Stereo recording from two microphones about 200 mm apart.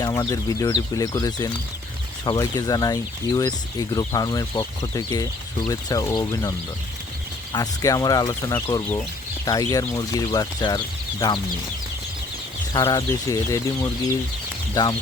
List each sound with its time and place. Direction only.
0.0 s speech: 15° left (ahead or behind)
7.5 s speech: 20° left (ahead or behind)
12.7 s speech: 20° left (ahead or behind)
14.8 s speech: 20° left (ahead or behind)